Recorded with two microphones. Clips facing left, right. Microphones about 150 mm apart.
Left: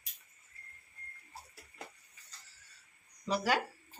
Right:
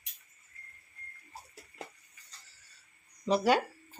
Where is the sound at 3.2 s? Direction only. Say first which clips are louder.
Right 6 dB; 25° right (ahead or behind).